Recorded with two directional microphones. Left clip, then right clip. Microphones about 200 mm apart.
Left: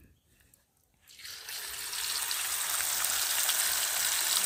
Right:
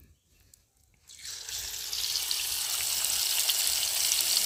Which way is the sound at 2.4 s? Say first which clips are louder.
Right 2 dB; 5° left (ahead or behind).